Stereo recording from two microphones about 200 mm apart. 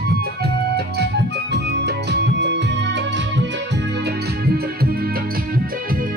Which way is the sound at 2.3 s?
60° right (ahead or behind).